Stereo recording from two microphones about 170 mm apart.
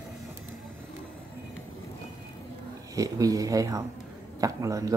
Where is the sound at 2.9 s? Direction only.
20° right (ahead or behind).